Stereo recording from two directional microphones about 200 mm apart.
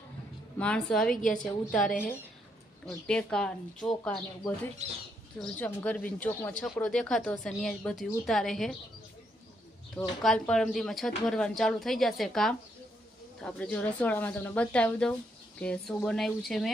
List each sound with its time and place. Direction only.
0.6 s speech: 5° left (ahead or behind)
4.8 s speech: 35° right (ahead or behind)
5.4 s speech: 5° left (ahead or behind)
10.2 s speech: 5° left (ahead or behind)